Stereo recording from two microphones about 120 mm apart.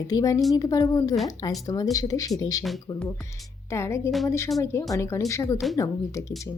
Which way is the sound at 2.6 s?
Centre (ahead or behind).